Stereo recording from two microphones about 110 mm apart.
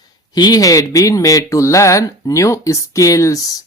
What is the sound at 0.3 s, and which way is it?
Speech, 35° left (ahead or behind).